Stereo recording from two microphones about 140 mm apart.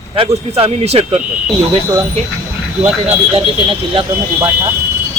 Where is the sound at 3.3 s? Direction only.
35° right (ahead or behind).